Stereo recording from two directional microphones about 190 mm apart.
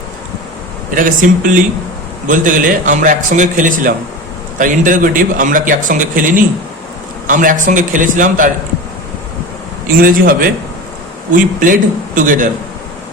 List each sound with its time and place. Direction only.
0.9 s a man's voice: 45° right (ahead or behind)
9.8 s a man's voice: 50° right (ahead or behind)